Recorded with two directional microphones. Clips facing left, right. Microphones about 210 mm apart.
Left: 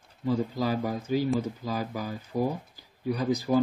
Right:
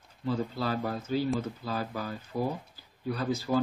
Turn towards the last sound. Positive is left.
turn(degrees=15)  # may be behind; listen again after turning